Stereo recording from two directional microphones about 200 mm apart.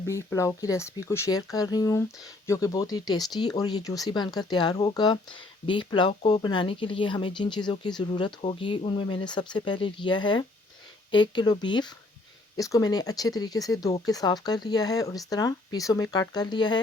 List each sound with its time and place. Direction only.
0.0 s speech: 15° left (ahead or behind)